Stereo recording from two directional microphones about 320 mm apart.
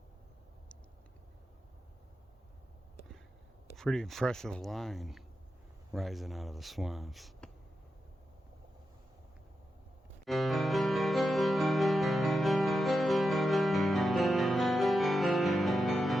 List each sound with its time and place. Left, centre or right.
3.8 s speech: centre
10.2 s music: centre